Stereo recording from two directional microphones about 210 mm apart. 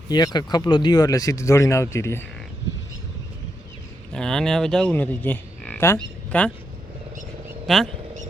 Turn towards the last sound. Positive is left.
turn(degrees=0)  # may be behind; listen again after turning